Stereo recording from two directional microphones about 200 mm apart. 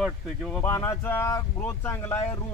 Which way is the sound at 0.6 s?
15° left (ahead or behind).